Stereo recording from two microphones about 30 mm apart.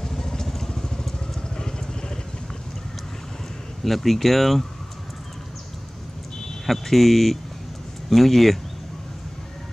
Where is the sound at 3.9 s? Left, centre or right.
Centre.